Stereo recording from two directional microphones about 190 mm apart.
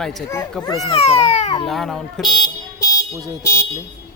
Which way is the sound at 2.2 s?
20° left (ahead or behind).